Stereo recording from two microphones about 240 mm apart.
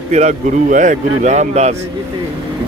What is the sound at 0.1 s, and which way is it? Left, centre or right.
Speech, right.